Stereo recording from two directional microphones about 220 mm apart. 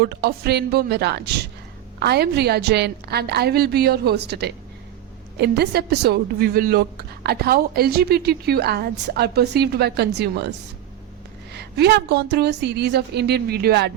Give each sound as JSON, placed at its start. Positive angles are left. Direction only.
{"t": 0.0, "sound": "a woman's voice", "side_deg": -45}
{"t": 11.5, "sound": "a woman's voice", "side_deg": -45}